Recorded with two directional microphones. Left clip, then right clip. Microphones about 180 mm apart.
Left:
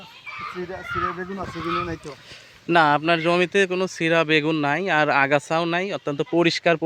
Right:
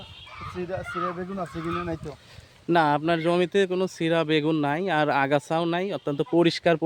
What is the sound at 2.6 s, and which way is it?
Speech, 5° right (ahead or behind).